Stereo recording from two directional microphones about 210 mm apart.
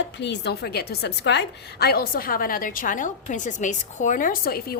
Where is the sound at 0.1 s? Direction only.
55° left (ahead or behind).